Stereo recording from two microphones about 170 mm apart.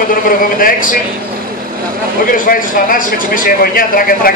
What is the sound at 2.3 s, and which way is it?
Speech, 55° left (ahead or behind).